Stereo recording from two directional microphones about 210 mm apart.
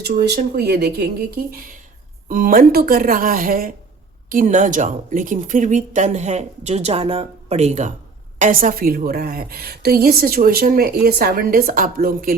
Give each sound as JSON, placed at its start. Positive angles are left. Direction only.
{"t": 0.0, "sound": "a woman's voice", "side_deg": -50}